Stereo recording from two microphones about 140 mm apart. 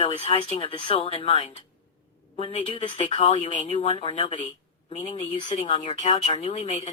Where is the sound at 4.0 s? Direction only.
35° left (ahead or behind).